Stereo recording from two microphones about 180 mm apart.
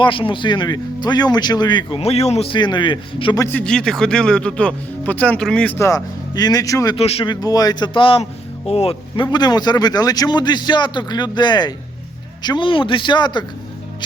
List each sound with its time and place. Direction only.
0.0 s speech: 30° left (ahead or behind)
3.4 s speech: 5° left (ahead or behind)
6.9 s speech: 35° left (ahead or behind)